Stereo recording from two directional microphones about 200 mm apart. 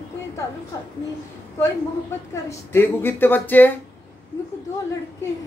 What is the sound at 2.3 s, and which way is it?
A woman's voice, 15° left (ahead or behind).